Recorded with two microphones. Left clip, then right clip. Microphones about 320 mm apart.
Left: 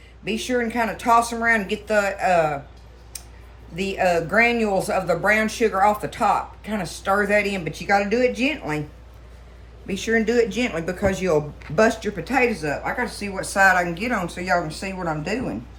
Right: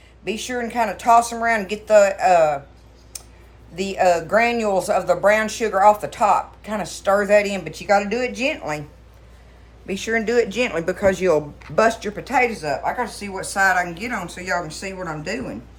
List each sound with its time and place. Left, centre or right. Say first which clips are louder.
0.3 s speech: left 2 dB; centre
3.8 s speech: right 3 dB; centre
9.8 s a woman's voice: even; right; by 15.5 s centre